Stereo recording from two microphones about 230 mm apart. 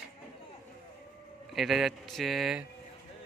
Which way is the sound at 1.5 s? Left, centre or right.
Centre.